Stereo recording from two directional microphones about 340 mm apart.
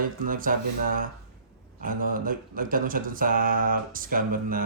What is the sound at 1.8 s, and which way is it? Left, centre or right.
Speech, right.